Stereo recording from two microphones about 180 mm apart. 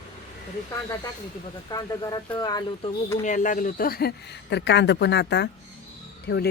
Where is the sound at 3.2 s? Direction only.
45° left (ahead or behind); by 6.4 s 65° left (ahead or behind).